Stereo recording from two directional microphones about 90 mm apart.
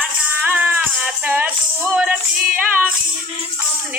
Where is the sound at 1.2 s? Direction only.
20° right (ahead or behind).